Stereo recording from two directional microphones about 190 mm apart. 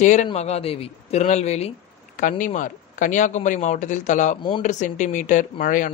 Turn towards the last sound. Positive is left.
turn(degrees=45)  # may be behind; listen again after turning